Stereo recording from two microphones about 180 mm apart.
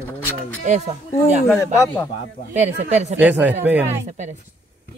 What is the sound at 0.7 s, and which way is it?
Speech, 40° right (ahead or behind).